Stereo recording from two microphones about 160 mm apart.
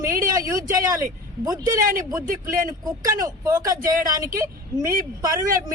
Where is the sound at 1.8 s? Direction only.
60° right (ahead or behind).